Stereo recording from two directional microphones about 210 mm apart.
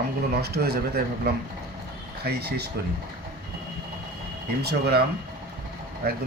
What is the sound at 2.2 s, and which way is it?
Speech, 50° right (ahead or behind).